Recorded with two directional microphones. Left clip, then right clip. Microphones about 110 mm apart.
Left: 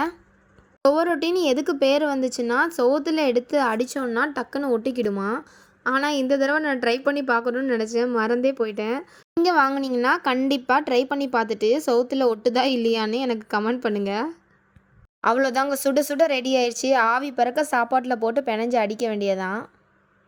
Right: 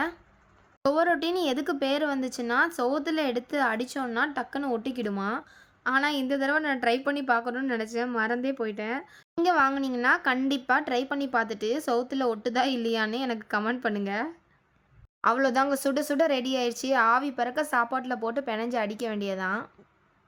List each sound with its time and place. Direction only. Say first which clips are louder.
0.9 s speech: left 4 dB; 35° left (ahead or behind)